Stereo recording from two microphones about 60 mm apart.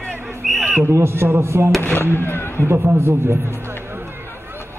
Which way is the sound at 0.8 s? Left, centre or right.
Right.